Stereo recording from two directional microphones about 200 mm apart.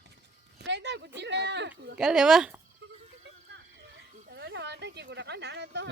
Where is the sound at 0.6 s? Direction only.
60° right (ahead or behind).